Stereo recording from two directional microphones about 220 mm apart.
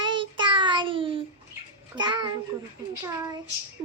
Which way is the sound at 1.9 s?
20° right (ahead or behind).